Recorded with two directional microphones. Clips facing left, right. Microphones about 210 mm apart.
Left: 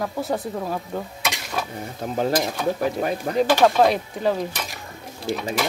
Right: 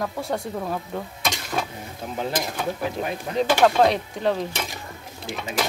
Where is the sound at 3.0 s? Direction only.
40° left (ahead or behind).